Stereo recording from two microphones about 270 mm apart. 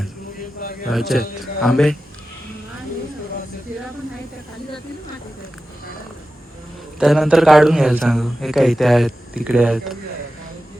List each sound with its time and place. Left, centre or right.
0.6 s a man's voice: left
0.9 s a man's voice: centre
7.0 s a man's voice: centre